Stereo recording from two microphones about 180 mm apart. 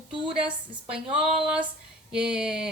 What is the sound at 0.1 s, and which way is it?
A woman's voice, 5° right (ahead or behind).